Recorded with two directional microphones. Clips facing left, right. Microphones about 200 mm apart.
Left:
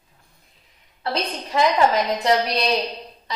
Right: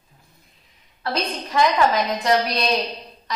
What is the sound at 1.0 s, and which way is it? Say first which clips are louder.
A woman's voice: even; 25° left (ahead or behind).